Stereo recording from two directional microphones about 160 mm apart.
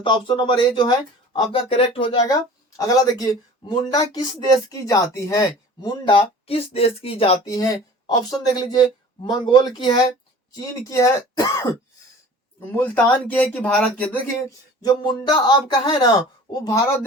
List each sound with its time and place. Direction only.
0.0 s speech: 30° left (ahead or behind)
2.2 s speech: 20° left (ahead or behind); by 7.3 s 35° left (ahead or behind)
7.4 s speech: 25° left (ahead or behind)
14.4 s speech: 20° left (ahead or behind)